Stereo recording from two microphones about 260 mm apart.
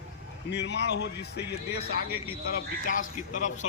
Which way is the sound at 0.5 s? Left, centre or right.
Left.